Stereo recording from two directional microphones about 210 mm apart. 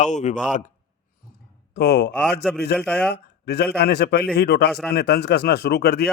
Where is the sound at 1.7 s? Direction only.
50° left (ahead or behind).